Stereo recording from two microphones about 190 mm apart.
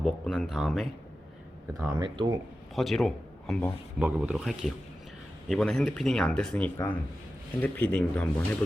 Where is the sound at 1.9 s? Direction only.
25° right (ahead or behind).